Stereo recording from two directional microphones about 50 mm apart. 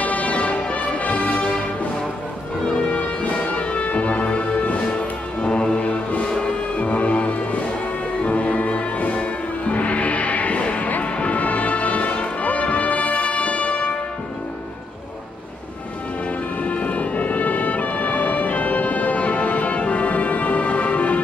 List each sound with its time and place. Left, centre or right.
0.0 s music: left
2.9 s music: left
5.4 s music: centre
16.6 s music: left